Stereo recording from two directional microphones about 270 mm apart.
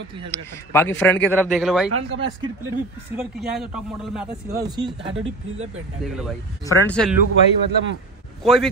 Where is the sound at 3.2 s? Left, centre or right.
Centre.